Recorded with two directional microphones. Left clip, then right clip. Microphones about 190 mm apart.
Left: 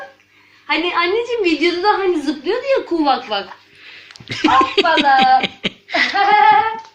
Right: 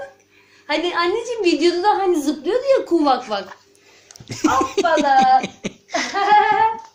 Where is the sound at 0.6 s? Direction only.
50° right (ahead or behind).